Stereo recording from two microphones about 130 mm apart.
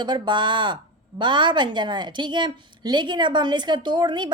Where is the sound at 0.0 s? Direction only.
35° right (ahead or behind).